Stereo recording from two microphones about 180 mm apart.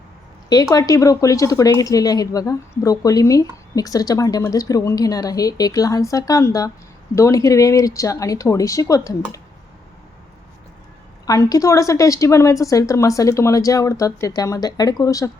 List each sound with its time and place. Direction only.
0.5 s speech: 20° left (ahead or behind)
11.3 s speech: 20° left (ahead or behind)